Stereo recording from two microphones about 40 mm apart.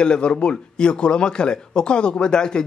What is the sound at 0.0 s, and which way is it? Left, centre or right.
Speech, left.